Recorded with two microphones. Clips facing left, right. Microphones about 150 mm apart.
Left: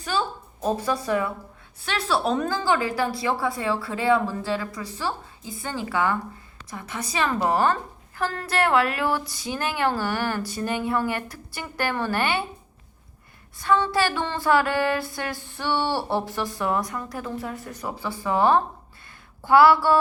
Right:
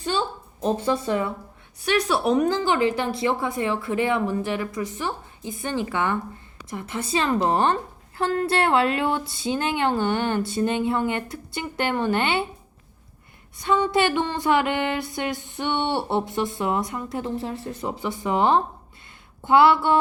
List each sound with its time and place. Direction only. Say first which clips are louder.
0.8 s a woman's voice: right 1 dB; 25° right (ahead or behind)
13.6 s a woman's voice: right 1 dB; 20° right (ahead or behind)